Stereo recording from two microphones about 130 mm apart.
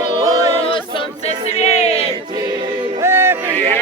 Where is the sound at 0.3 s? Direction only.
30° right (ahead or behind).